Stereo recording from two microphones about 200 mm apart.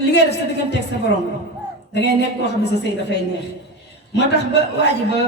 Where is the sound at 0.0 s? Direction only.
55° left (ahead or behind).